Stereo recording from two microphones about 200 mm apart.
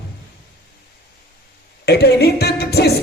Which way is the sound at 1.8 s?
55° left (ahead or behind).